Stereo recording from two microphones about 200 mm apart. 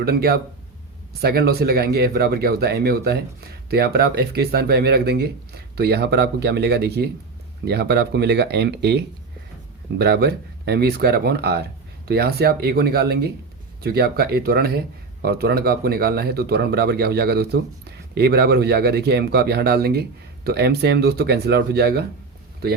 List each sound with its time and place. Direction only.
0.0 s speech: 50° right (ahead or behind)